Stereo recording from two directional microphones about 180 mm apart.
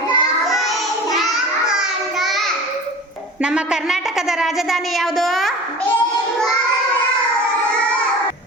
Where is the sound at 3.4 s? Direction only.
5° right (ahead or behind).